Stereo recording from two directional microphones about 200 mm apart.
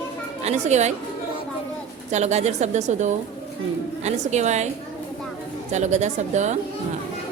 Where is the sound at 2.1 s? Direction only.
35° right (ahead or behind).